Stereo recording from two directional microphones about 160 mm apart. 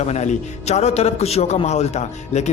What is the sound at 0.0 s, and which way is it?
A man's voice, 45° left (ahead or behind).